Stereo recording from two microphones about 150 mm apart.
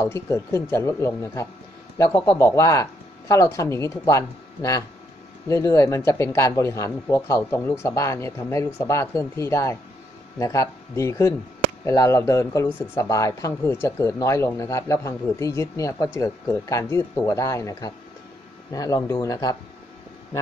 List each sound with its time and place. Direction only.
0.0 s speech: 20° left (ahead or behind)